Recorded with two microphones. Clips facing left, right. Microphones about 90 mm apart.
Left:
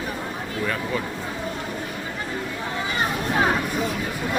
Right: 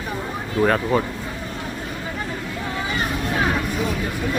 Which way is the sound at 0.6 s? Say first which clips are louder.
Right 9 dB; 50° right (ahead or behind).